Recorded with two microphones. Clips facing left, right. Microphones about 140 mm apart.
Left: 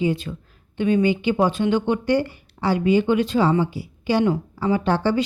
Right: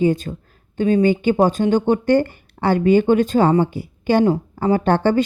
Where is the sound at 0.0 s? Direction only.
45° right (ahead or behind).